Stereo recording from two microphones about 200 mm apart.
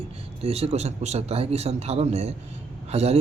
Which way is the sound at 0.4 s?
30° right (ahead or behind).